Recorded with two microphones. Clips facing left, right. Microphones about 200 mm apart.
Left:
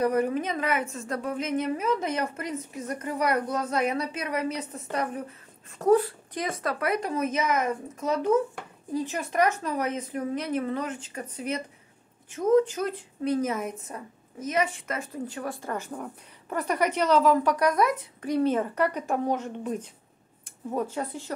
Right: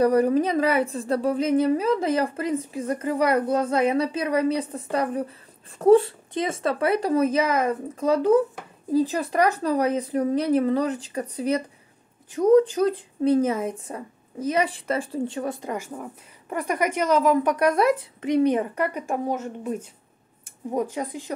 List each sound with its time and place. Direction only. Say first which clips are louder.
0.0 s a woman's voice: right 6 dB; 35° right (ahead or behind); by 21.3 s 15° right (ahead or behind)